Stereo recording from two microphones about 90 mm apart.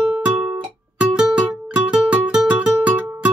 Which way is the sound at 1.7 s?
15° right (ahead or behind).